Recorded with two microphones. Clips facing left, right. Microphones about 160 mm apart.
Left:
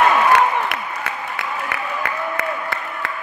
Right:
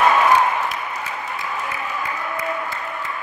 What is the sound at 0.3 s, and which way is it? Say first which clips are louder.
Applause: left 1 dB; 70° left (ahead or behind).